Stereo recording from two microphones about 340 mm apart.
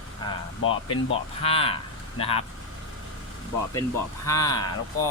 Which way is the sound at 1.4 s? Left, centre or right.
Centre.